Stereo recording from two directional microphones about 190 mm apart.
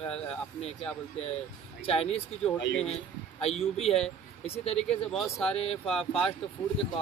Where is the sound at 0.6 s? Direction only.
35° left (ahead or behind).